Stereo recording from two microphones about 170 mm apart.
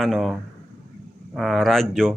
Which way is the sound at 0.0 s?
Centre (ahead or behind).